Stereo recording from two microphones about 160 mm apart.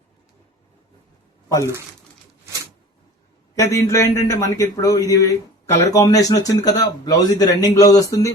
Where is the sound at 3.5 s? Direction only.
20° left (ahead or behind).